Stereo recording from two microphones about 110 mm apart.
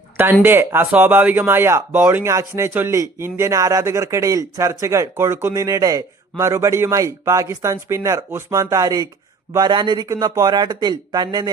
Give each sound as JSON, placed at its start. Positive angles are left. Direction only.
{"t": 0.4, "sound": "speech", "side_deg": -20}
{"t": 9.6, "sound": "speech", "side_deg": -45}